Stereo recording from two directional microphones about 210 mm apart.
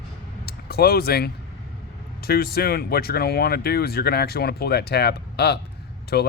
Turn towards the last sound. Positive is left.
turn(degrees=50)  # may be behind; listen again after turning